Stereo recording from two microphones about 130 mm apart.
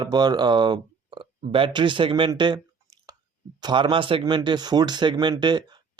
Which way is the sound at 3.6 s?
40° right (ahead or behind).